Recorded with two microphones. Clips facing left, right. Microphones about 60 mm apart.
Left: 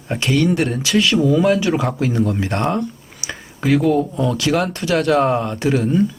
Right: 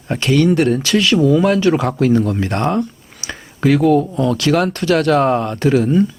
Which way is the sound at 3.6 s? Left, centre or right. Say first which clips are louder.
Right 3 dB; centre.